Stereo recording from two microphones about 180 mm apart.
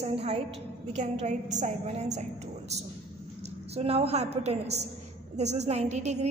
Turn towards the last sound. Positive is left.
turn(degrees=-40)  # may be behind; listen again after turning